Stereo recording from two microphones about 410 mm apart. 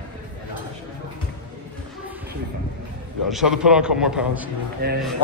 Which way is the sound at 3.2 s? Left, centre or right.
Centre.